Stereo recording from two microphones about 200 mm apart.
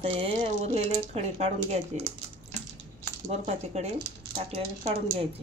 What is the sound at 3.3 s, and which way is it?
Speech, 35° right (ahead or behind).